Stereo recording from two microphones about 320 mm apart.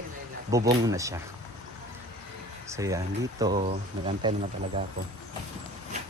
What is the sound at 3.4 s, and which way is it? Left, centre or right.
Speech, centre.